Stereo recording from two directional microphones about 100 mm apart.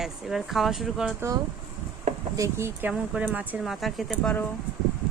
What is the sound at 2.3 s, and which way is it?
Speech, 30° right (ahead or behind).